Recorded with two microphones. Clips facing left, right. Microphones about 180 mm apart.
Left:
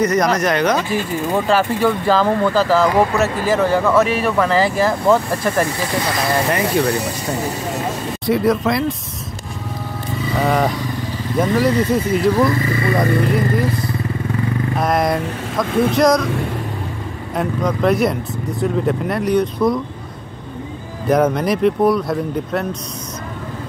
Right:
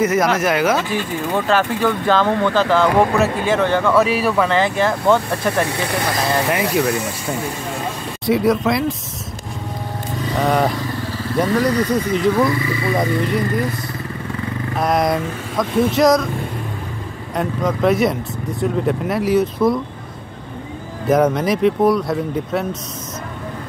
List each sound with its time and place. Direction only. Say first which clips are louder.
0.0 s speech: even; 5° right (ahead or behind)
1.3 s speech: left 1 dB; 10° left (ahead or behind)
8.3 s speech: even; centre (ahead or behind)
10.3 s speech: even; centre (ahead or behind)
12.5 s speech: left 2 dB; 50° left (ahead or behind)
12.9 s speech: left 2 dB; centre (ahead or behind)
17.4 s speech: even; centre (ahead or behind)
21.1 s speech: even; centre (ahead or behind)